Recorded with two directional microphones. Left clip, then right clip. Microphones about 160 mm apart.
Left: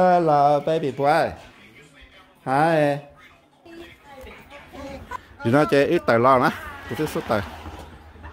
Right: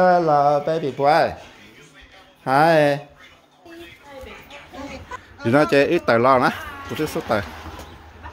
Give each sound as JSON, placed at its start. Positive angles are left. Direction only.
{"t": 0.0, "sound": "a sound", "side_deg": 15}
{"t": 1.0, "sound": "speech", "side_deg": 5}
{"t": 2.4, "sound": "speech", "side_deg": -5}
{"t": 5.4, "sound": "speech", "side_deg": 10}